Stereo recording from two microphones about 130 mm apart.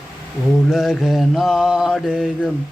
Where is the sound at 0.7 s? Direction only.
Centre (ahead or behind).